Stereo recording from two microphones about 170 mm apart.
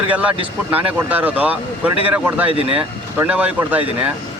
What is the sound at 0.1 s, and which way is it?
Speech, 10° right (ahead or behind).